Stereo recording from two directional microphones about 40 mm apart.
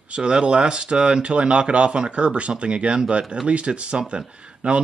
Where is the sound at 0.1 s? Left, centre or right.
Right.